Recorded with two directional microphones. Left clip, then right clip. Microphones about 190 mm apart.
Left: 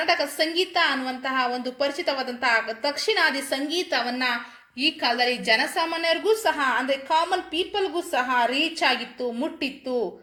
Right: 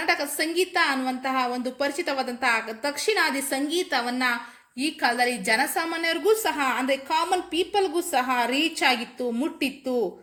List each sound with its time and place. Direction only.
0.0 s a woman's voice: 45° right (ahead or behind)